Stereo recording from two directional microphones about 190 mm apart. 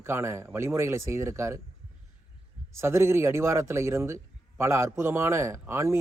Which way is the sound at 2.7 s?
15° right (ahead or behind).